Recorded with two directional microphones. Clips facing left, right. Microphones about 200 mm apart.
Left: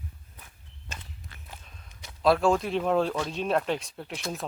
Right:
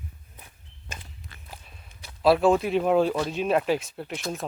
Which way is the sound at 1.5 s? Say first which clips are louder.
Right 3 dB; 10° right (ahead or behind).